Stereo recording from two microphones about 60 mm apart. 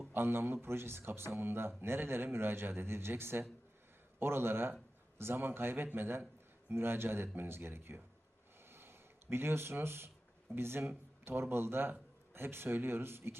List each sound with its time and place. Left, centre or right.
0.1 s speech: right
8.7 s a sound: right
10.5 s a man's voice: right